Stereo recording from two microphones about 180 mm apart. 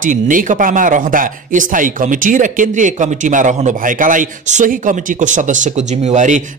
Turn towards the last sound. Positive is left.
turn(degrees=-40)  # may be behind; listen again after turning